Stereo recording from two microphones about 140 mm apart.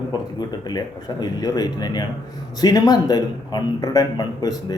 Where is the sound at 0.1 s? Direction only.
30° left (ahead or behind).